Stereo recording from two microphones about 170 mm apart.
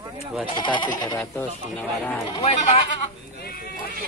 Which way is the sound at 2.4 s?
45° left (ahead or behind).